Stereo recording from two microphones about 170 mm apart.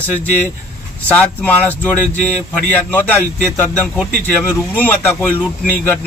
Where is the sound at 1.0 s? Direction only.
10° left (ahead or behind).